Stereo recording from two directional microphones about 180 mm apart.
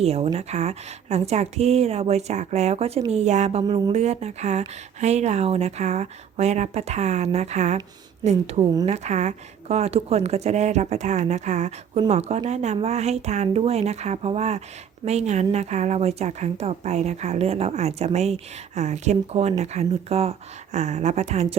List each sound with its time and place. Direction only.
0.0 s speech: 35° right (ahead or behind)
3.6 s speech: 25° right (ahead or behind)
3.9 s speech: 35° right (ahead or behind)